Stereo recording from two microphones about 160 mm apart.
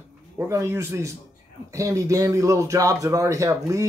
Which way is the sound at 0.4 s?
20° right (ahead or behind).